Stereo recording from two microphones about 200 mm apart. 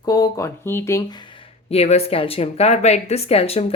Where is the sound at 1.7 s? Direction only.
30° left (ahead or behind).